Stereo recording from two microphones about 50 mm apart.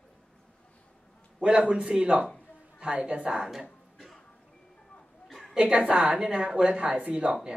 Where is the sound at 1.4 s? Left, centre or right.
Right.